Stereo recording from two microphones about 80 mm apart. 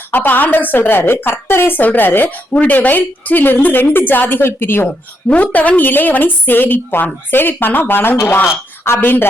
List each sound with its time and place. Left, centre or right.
0.1 s a woman's voice: left
4.9 s a woman's voice: centre